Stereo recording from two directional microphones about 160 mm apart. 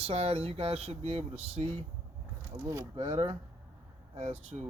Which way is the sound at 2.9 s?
35° right (ahead or behind).